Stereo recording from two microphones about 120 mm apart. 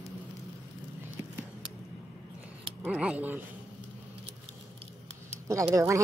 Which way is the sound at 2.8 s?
10° right (ahead or behind).